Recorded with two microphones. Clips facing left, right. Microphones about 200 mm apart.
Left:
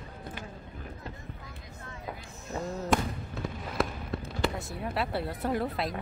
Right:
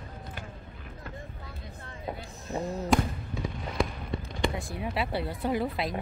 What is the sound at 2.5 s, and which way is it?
Basketball bounce, 15° right (ahead or behind).